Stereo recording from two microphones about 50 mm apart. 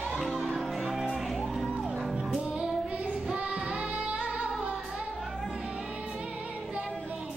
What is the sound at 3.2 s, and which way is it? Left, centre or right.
Child singing, right.